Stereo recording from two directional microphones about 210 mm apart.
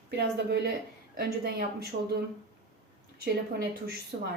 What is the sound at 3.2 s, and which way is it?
Speech, 50° right (ahead or behind).